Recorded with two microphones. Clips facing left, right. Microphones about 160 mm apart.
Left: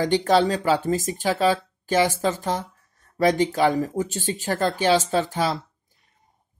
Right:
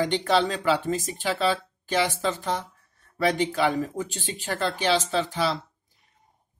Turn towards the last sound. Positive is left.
turn(degrees=45)  # may be behind; listen again after turning